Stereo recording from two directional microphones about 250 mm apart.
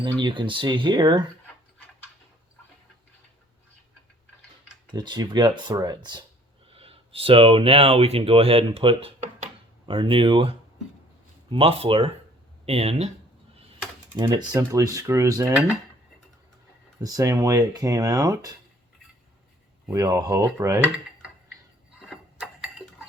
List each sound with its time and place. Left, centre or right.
0.2 s speech: centre
4.9 s speech: centre
14.2 s speech: centre
17.0 s speech: centre
19.9 s speech: centre
22.0 s a sound: centre